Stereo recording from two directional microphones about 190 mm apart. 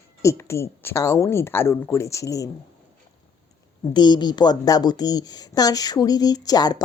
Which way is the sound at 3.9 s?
20° left (ahead or behind).